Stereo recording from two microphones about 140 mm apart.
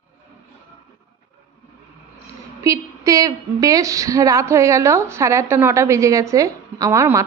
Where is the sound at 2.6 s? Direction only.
25° right (ahead or behind).